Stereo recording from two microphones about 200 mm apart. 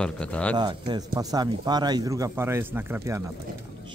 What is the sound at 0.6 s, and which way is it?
Speech, 20° right (ahead or behind).